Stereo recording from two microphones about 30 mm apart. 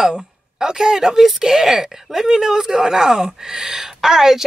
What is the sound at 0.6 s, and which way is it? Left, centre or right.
Speech, right.